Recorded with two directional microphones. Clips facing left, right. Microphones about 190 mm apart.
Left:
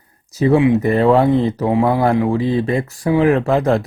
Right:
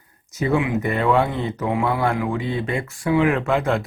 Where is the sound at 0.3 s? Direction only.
35° left (ahead or behind).